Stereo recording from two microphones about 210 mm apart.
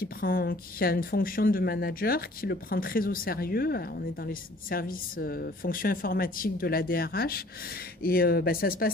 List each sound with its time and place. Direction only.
0.0 s speech: 45° left (ahead or behind)